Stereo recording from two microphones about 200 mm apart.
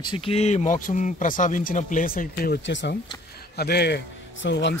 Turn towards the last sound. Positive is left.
turn(degrees=60)  # may be behind; listen again after turning